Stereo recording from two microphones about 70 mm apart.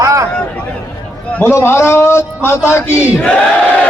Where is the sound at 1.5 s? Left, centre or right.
Left.